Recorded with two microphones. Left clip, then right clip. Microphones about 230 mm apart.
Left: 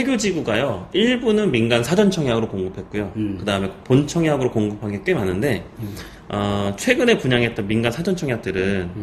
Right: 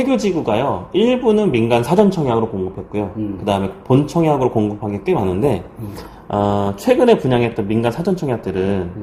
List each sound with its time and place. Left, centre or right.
0.0 s speech: centre
3.4 s speech: centre